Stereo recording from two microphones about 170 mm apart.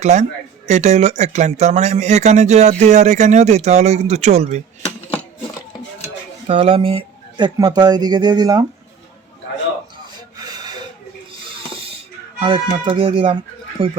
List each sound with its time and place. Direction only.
0.0 s speech: 45° right (ahead or behind)
6.5 s speech: 35° right (ahead or behind)
10.3 s rub: 25° right (ahead or behind)
11.3 s a sound: 35° right (ahead or behind)
12.4 s speech: 35° right (ahead or behind)